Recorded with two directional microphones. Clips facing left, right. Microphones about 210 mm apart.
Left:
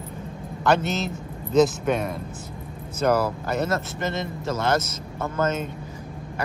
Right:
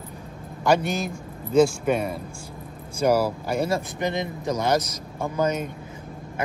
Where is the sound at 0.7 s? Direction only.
10° right (ahead or behind).